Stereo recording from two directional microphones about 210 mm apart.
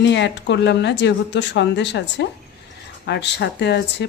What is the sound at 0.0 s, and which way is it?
Speech, 55° left (ahead or behind).